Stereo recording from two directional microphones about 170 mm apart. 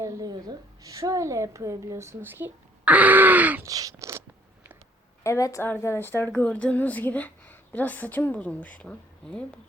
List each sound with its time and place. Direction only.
0.0 s a woman's voice: 20° right (ahead or behind)
3.7 s a sound: 20° right (ahead or behind)
5.2 s a woman's voice: 20° left (ahead or behind)